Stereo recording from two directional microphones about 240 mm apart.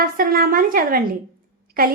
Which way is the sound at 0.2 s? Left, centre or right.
Right.